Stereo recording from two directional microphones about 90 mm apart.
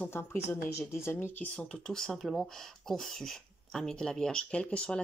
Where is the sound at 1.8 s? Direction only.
5° left (ahead or behind).